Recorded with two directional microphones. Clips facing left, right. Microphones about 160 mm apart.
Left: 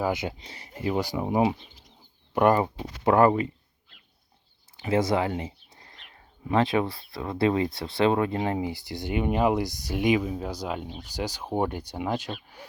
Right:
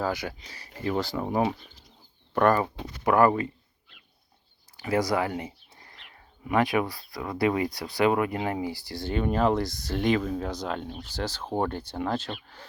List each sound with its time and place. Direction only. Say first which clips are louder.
0.0 s speech: left 2 dB; 20° left (ahead or behind)
4.8 s speech: left 1 dB; 25° left (ahead or behind)